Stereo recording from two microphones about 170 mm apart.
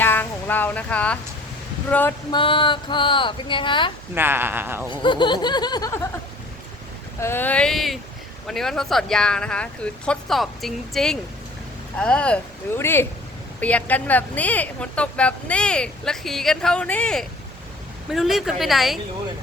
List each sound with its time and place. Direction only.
0.0 s speech: 10° left (ahead or behind)
2.3 s speech: 30° left (ahead or behind)
4.1 s speech: 10° right (ahead or behind)
4.9 s speech: 30° left (ahead or behind)
7.2 s speech: 15° left (ahead or behind)